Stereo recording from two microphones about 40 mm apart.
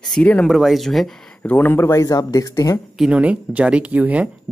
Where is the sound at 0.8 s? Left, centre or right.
Centre.